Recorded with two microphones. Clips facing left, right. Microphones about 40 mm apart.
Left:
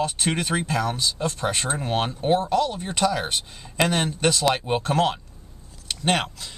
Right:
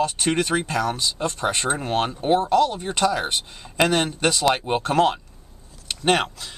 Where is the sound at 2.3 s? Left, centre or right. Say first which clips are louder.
Right 3 dB; centre.